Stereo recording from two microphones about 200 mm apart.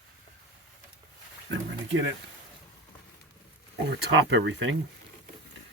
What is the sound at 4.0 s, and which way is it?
Speech, 65° right (ahead or behind).